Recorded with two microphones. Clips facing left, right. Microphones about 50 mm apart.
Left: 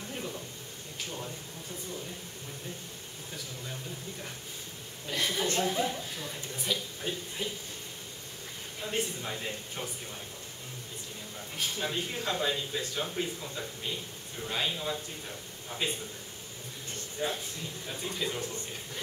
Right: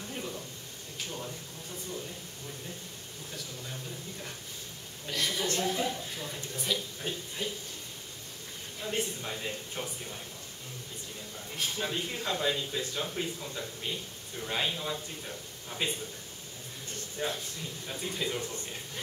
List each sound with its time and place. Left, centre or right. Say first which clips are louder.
0.1 s sizzle: even; centre
5.1 s a woman's voice: left 1 dB; left
6.1 s speech: even; centre
8.8 s speech: even; centre
11.5 s speech: even; centre
17.2 s a woman's voice: left 1 dB; centre